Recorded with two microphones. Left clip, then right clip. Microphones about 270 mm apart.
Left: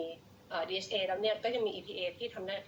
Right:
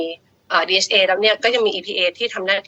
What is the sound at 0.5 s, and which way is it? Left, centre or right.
A woman's voice, right.